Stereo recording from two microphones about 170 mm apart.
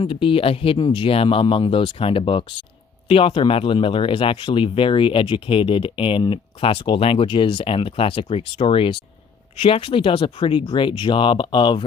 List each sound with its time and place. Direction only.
0.0 s speech: 30° left (ahead or behind)